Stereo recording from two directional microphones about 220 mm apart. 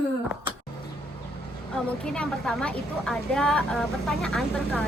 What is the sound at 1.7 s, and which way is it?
A woman's voice, 5° left (ahead or behind).